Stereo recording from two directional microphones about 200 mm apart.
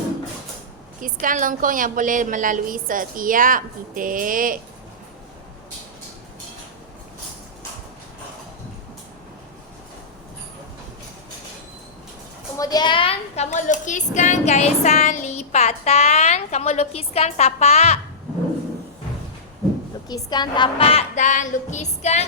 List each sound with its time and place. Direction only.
1.0 s a woman's voice: 40° right (ahead or behind)
12.5 s a woman's voice: 20° left (ahead or behind)
20.1 s a woman's voice: 20° left (ahead or behind)